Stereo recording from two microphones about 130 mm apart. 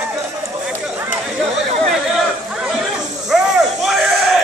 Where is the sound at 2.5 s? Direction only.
5° right (ahead or behind).